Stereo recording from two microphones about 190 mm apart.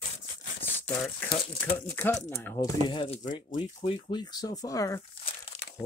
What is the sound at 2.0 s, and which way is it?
Speech, 15° left (ahead or behind).